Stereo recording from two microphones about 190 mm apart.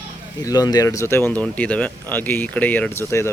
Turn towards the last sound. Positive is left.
turn(degrees=10)  # may be behind; listen again after turning